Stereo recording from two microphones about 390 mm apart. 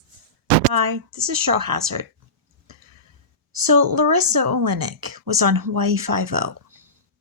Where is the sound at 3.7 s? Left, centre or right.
Right.